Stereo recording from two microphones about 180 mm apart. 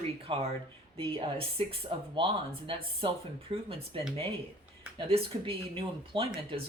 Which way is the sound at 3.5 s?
30° right (ahead or behind).